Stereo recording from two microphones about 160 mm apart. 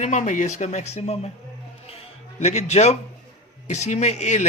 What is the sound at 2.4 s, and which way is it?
Speech, 45° left (ahead or behind).